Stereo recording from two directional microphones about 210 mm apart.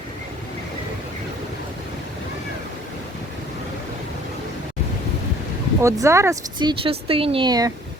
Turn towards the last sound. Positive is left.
turn(degrees=-20)  # may be behind; listen again after turning